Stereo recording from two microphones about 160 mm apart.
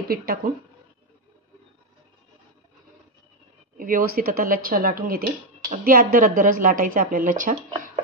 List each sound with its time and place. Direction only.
0.1 s speech: 70° right (ahead or behind)
3.7 s speech: 60° right (ahead or behind)